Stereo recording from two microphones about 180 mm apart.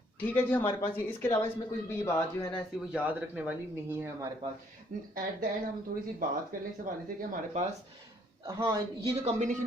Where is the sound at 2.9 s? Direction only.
10° right (ahead or behind).